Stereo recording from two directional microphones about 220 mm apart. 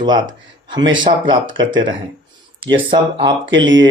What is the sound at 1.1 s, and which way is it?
Speech, 30° right (ahead or behind).